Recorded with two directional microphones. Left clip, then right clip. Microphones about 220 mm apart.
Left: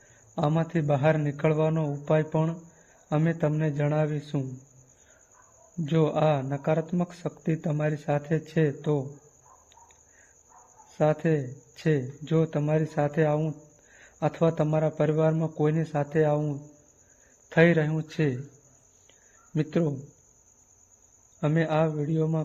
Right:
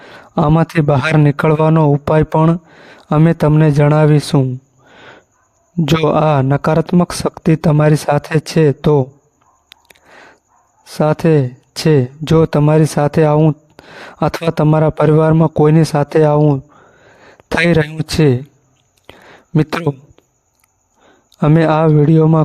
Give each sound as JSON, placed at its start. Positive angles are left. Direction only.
{"t": 0.3, "sound": "speech", "side_deg": -50}
{"t": 5.8, "sound": "speech", "side_deg": -55}
{"t": 10.9, "sound": "speech", "side_deg": -45}
{"t": 19.5, "sound": "speech", "side_deg": -50}
{"t": 21.4, "sound": "speech", "side_deg": -50}